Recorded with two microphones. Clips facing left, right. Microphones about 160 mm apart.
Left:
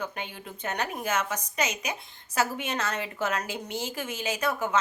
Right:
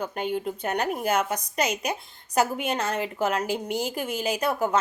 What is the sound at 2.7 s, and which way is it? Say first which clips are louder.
Speech: right 4 dB; 30° right (ahead or behind).